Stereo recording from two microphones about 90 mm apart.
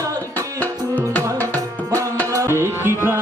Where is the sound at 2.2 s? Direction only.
35° right (ahead or behind).